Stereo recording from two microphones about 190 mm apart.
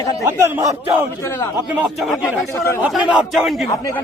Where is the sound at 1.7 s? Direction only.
5° right (ahead or behind).